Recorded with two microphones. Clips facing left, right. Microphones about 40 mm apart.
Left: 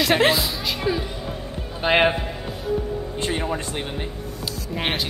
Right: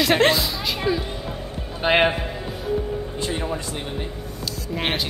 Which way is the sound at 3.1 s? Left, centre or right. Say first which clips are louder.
Left 3 dB; left.